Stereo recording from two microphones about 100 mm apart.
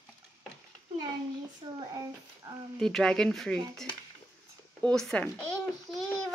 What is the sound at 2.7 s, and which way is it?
Speech, 5° left (ahead or behind).